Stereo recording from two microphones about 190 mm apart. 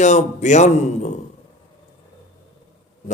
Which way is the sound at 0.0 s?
35° left (ahead or behind).